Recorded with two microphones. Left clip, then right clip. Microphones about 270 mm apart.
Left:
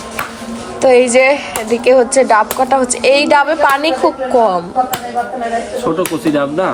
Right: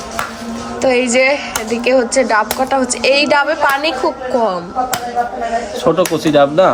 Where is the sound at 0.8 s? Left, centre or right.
Centre.